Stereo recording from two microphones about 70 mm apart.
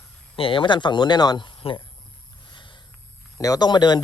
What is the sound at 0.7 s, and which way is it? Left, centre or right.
Speech, left.